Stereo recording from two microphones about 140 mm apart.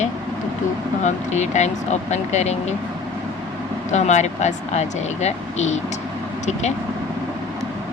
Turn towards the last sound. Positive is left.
turn(degrees=55)  # may be behind; listen again after turning